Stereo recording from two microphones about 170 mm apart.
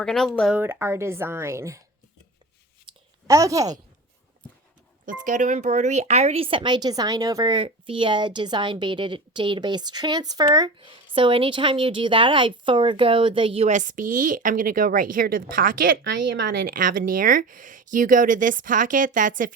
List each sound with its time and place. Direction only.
0.0 s speech: centre (ahead or behind)
0.6 s speech: 15° right (ahead or behind)
2.9 s a sound: 30° right (ahead or behind)
3.2 s speech: 20° right (ahead or behind)
5.0 s speech: 50° right (ahead or behind); by 16.7 s 80° right
16.7 s speech: 55° right (ahead or behind)